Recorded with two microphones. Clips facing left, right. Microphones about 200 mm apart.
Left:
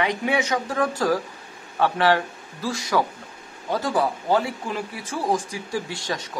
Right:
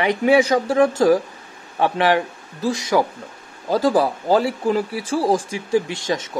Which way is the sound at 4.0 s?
35° right (ahead or behind).